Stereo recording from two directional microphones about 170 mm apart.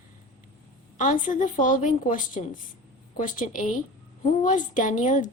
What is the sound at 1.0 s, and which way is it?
Speech, 50° left (ahead or behind).